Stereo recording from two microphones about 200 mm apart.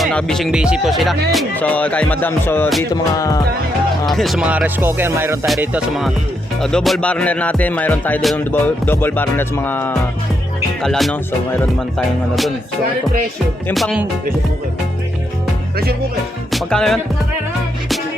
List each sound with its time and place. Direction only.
0.0 s music: 5° left (ahead or behind)
4.0 s speech: centre (ahead or behind)
5.5 s music: 5° right (ahead or behind)
13.7 s music: centre (ahead or behind)
16.5 s music: centre (ahead or behind)